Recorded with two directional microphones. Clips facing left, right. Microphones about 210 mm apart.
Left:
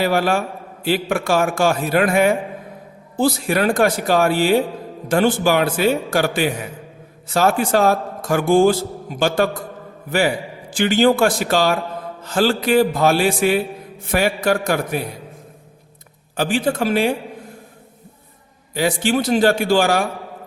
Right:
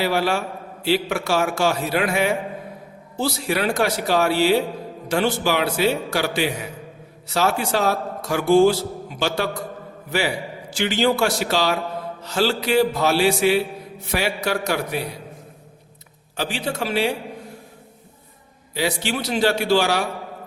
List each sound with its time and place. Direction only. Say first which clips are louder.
0.0 s a man's voice: left 3 dB; 50° left (ahead or behind)
16.4 s a man's voice: left 7 dB; 50° left (ahead or behind)
18.7 s a man's voice: left 5 dB; 50° left (ahead or behind)